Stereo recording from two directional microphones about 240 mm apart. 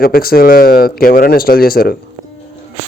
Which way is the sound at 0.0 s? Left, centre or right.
Left.